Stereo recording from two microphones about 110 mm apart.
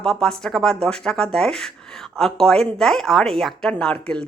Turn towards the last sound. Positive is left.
turn(degrees=10)  # may be behind; listen again after turning